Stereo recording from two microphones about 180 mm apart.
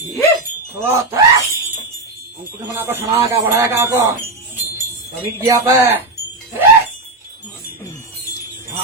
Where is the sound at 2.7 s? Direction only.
15° right (ahead or behind).